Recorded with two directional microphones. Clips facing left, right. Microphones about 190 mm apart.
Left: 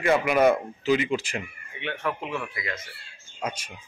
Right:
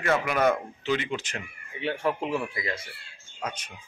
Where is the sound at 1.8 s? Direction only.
30° right (ahead or behind).